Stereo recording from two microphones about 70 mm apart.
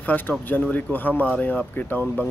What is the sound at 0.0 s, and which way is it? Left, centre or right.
Speech, left.